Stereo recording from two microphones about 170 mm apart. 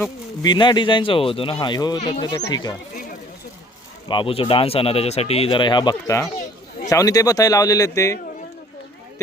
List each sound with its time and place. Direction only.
0.4 s speech: 25° left (ahead or behind)
4.1 s speech: 30° left (ahead or behind)